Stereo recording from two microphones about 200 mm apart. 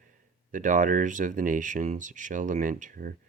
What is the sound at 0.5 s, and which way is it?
Speech, 40° right (ahead or behind).